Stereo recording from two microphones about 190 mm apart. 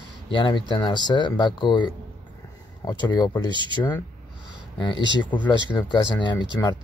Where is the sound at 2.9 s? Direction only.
25° left (ahead or behind).